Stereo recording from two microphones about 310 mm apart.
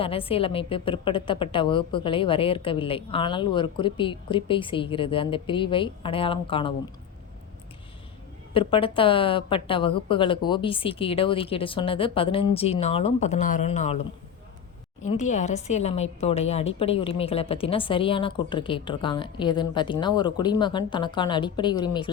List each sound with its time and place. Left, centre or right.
0.0 s a woman's voice: centre
8.5 s a woman's voice: centre
15.0 s a woman's voice: left